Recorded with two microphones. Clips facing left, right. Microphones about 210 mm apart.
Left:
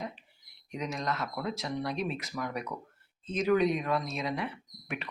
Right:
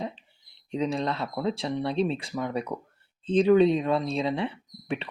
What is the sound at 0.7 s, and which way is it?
Speech, 30° right (ahead or behind).